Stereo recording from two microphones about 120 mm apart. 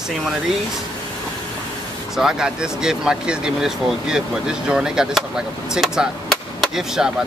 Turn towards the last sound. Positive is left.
turn(degrees=-5)  # may be behind; listen again after turning